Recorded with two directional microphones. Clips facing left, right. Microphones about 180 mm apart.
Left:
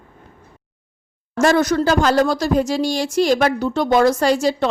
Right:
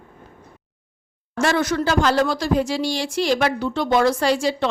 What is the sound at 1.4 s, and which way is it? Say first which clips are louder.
A woman's voice: left 5 dB; 40° left (ahead or behind).